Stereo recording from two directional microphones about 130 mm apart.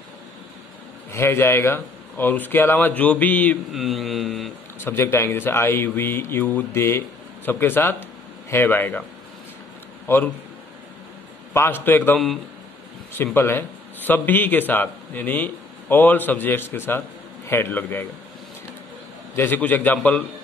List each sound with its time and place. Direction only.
1.1 s a man's voice: 20° left (ahead or behind)
3.7 s speech: centre (ahead or behind)
4.7 s a man's voice: 15° left (ahead or behind)
10.0 s a man's voice: 15° left (ahead or behind)
11.5 s a man's voice: 15° left (ahead or behind)
13.2 s a man's voice: 15° left (ahead or behind)
19.3 s a man's voice: 15° left (ahead or behind)